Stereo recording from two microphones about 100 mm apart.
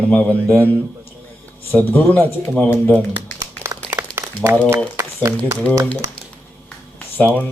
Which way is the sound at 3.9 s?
25° right (ahead or behind).